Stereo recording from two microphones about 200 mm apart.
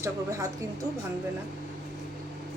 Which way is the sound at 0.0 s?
15° right (ahead or behind).